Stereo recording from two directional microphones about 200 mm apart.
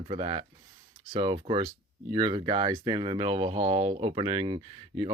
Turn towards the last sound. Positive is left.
turn(degrees=-30)  # may be behind; listen again after turning